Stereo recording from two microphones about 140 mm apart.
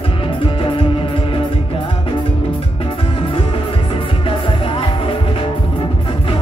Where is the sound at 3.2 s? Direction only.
40° left (ahead or behind).